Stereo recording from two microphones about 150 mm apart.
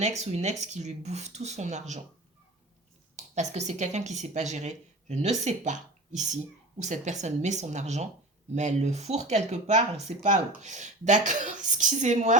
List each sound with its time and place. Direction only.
0.0 s speech: 50° right (ahead or behind)
3.2 s speech: 50° right (ahead or behind)